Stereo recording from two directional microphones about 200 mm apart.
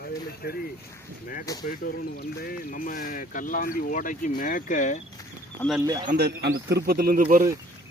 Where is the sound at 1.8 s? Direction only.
50° left (ahead or behind).